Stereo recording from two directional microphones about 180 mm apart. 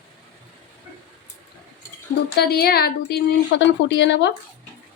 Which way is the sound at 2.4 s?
60° left (ahead or behind).